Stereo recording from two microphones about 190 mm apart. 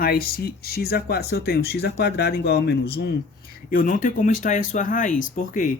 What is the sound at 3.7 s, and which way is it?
Speech, 45° left (ahead or behind).